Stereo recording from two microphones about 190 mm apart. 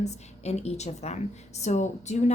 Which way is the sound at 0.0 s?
35° left (ahead or behind).